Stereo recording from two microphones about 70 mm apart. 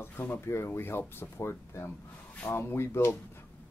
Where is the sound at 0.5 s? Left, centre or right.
Left.